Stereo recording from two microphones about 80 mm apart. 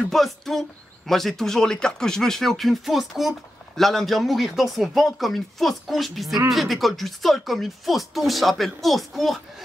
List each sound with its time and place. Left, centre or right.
0.1 s speech: centre